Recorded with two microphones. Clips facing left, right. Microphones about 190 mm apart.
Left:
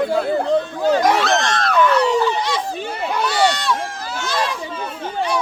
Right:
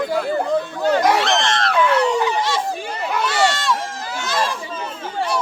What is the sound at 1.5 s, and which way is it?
Dog, 25° right (ahead or behind).